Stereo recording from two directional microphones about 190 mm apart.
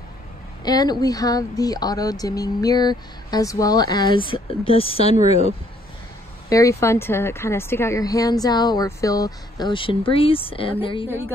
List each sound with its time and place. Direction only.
0.7 s a woman's voice: 20° left (ahead or behind)
6.5 s a woman's voice: 15° left (ahead or behind)
11.1 s a woman's voice: 10° right (ahead or behind)